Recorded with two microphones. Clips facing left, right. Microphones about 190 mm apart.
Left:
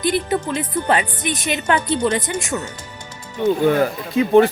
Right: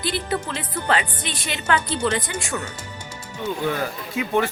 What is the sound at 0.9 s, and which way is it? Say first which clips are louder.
A woman's voice: left 2 dB; 20° left (ahead or behind).